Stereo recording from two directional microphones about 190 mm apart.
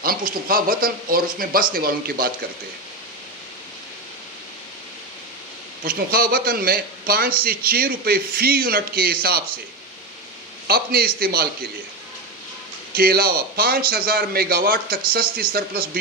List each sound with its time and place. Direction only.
0.0 s a man's voice: 50° right (ahead or behind)
5.8 s a man's voice: 50° right (ahead or behind)
10.7 s a man's voice: 55° right (ahead or behind)
13.0 s a man's voice: 50° right (ahead or behind)